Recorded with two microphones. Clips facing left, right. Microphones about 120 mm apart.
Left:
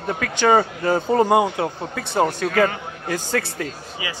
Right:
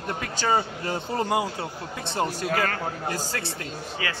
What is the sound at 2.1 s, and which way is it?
Speech, 60° left (ahead or behind).